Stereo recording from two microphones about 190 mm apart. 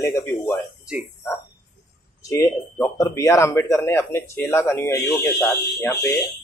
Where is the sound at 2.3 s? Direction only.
15° left (ahead or behind).